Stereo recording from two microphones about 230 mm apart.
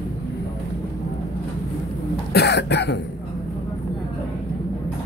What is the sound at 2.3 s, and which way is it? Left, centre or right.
Cough, left.